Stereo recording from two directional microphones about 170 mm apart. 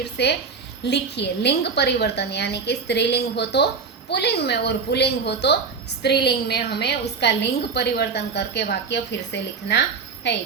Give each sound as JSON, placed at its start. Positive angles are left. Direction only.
{"t": 0.0, "sound": "a woman's voice", "side_deg": 80}